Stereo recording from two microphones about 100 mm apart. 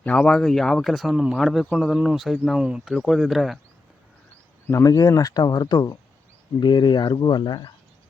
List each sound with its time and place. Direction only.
0.0 s speech: 10° left (ahead or behind); by 2.9 s 10° right (ahead or behind)
2.9 s speech: 5° left (ahead or behind)
4.6 s speech: 30° left (ahead or behind); by 7.7 s 50° left (ahead or behind)